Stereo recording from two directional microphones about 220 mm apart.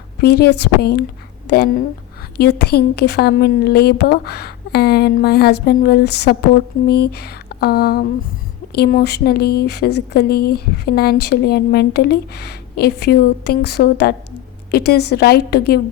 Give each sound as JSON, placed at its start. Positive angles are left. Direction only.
{"t": 0.2, "sound": "a woman's voice", "side_deg": 45}